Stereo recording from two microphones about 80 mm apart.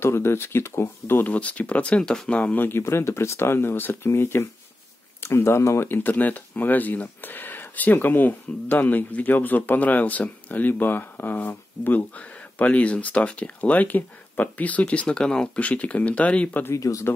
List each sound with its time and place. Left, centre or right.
0.0 s speech: left; by 16.6 s centre
16.6 s speech: left